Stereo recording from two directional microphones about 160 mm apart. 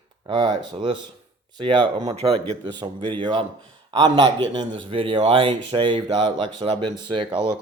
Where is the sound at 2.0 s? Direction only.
35° right (ahead or behind).